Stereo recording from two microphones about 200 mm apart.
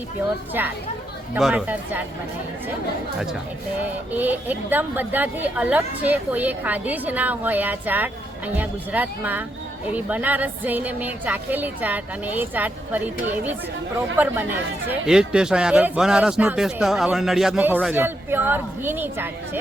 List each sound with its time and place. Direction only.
1.4 s speech: 5° right (ahead or behind)
4.1 s speech: 10° right (ahead or behind)